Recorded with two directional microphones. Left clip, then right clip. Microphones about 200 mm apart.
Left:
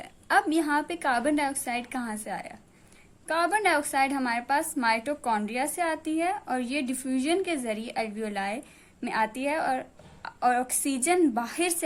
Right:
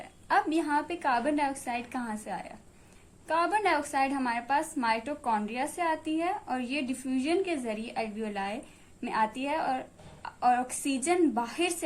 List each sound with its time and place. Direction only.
0.0 s a woman's voice: 40° left (ahead or behind)